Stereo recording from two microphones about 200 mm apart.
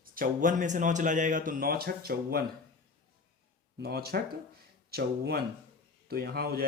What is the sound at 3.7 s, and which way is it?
Speech, 50° right (ahead or behind).